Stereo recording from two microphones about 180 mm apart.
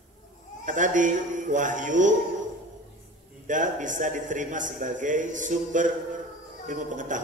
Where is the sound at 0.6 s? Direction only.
45° right (ahead or behind).